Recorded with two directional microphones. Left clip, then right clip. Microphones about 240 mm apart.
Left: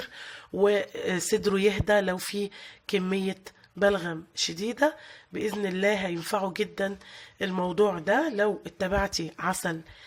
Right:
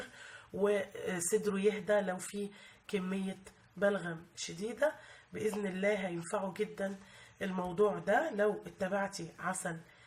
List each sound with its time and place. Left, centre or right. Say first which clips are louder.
0.6 s speech: left 8 dB; left